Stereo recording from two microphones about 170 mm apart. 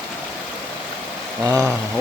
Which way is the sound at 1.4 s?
20° right (ahead or behind).